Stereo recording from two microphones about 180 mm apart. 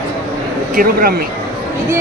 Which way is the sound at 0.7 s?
55° right (ahead or behind).